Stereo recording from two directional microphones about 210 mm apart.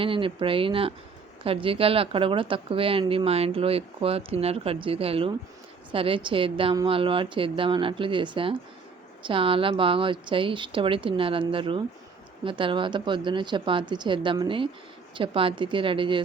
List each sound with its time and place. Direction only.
0.0 s a woman's voice: 25° right (ahead or behind)